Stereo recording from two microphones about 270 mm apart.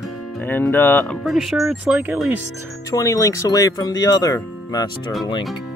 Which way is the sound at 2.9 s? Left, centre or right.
Centre.